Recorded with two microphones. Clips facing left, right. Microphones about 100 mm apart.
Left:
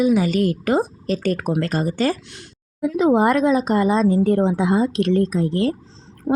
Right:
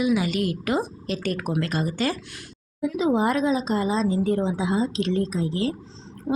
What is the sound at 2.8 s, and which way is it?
A woman's voice, 55° left (ahead or behind).